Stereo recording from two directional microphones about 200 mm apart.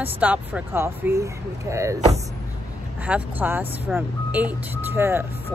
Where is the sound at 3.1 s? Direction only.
10° right (ahead or behind).